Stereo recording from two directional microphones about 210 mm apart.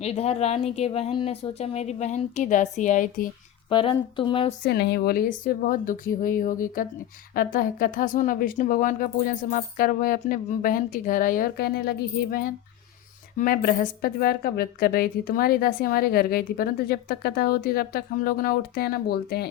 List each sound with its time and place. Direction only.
0.0 s a woman's voice: 30° left (ahead or behind)
3.7 s speech: 25° left (ahead or behind)
4.6 s a woman's voice: 50° left (ahead or behind)